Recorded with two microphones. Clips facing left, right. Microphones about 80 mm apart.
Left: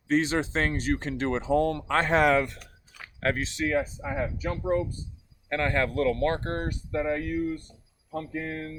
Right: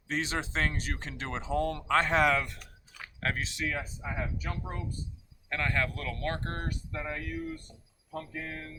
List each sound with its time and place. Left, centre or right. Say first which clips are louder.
0.1 s speech: left 8 dB; left